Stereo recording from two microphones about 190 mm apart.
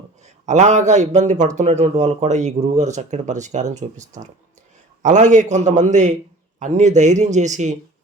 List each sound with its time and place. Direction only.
0.2 s speech: 40° right (ahead or behind)